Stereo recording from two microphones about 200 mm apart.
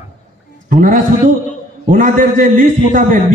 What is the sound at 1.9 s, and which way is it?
A man's voice, 40° right (ahead or behind).